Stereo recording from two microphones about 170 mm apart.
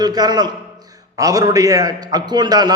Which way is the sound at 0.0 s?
25° right (ahead or behind).